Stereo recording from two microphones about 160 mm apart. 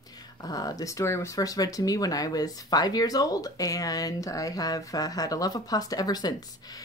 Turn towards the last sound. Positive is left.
turn(degrees=25)  # may be behind; listen again after turning